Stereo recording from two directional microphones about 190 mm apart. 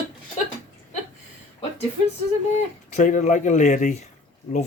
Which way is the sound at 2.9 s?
40° left (ahead or behind).